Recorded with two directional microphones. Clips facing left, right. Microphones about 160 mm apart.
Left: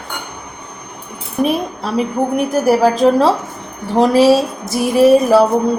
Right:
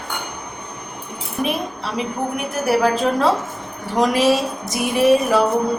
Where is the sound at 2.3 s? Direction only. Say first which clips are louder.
Left 6 dB; 40° left (ahead or behind).